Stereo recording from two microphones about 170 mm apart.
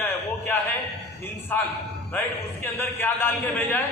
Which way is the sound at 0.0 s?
10° left (ahead or behind).